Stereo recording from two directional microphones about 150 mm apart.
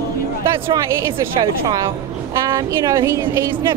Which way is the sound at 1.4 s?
30° right (ahead or behind).